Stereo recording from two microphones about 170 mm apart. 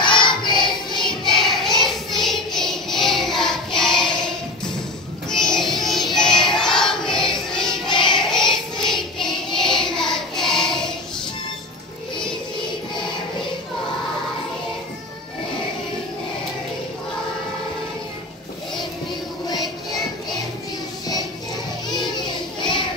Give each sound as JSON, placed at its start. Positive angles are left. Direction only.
{"t": 0.0, "sound": "music", "side_deg": 25}
{"t": 1.3, "sound": "choir", "side_deg": 0}
{"t": 5.3, "sound": "music", "side_deg": 0}
{"t": 6.5, "sound": "choir", "side_deg": 5}
{"t": 8.0, "sound": "music", "side_deg": 5}
{"t": 21.8, "sound": "child singing", "side_deg": 25}